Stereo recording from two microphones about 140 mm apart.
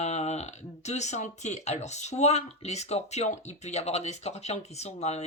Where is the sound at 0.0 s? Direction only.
50° left (ahead or behind).